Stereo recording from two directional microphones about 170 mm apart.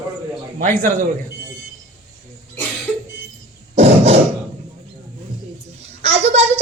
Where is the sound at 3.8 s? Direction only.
40° right (ahead or behind).